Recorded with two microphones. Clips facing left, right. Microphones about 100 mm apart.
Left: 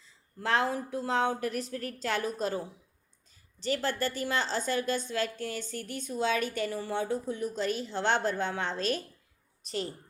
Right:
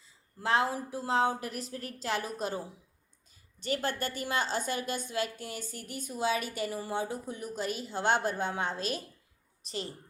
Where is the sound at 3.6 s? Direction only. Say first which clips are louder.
Left 2 dB; 20° right (ahead or behind).